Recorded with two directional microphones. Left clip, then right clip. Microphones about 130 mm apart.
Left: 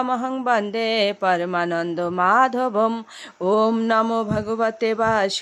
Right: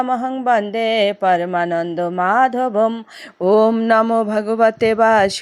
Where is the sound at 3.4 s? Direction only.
30° right (ahead or behind).